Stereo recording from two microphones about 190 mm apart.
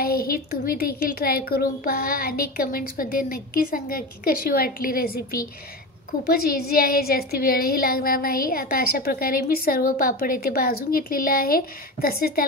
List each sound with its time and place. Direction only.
0.0 s a woman's voice: 50° left (ahead or behind)